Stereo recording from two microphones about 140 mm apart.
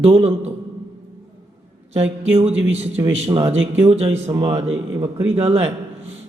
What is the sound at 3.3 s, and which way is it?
Speech, 30° right (ahead or behind).